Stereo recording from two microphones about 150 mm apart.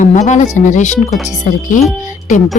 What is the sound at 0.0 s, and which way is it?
A woman's voice, 50° left (ahead or behind).